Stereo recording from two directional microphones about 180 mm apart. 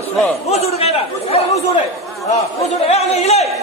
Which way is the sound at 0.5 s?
35° left (ahead or behind).